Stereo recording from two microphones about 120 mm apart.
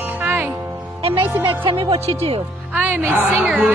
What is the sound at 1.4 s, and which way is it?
A woman's voice, 45° right (ahead or behind).